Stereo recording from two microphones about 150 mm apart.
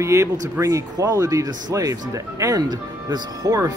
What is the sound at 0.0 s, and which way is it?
Speech, 20° right (ahead or behind).